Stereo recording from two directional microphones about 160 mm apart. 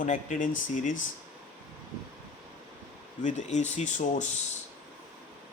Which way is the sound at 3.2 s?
45° left (ahead or behind).